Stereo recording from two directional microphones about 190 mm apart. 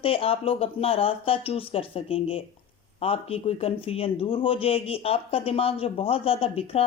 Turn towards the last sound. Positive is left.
turn(degrees=30)  # may be behind; listen again after turning